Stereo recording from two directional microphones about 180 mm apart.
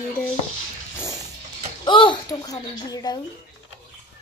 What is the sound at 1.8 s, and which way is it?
A child's voice, 25° left (ahead or behind).